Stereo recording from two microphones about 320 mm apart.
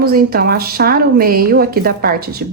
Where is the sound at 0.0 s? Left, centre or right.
Right.